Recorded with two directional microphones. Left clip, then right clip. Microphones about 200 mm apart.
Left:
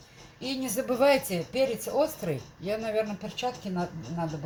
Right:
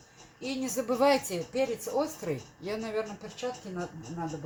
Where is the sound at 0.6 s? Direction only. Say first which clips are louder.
Left 2 dB; 20° right (ahead or behind).